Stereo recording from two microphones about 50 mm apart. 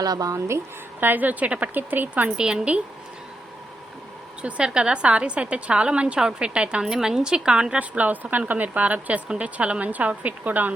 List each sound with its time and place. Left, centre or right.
0.3 s speech: right
0.9 s speech: right
2.4 s a woman's voice: right
4.4 s a woman's voice: right
6.8 s a woman's voice: centre; by 10.7 s right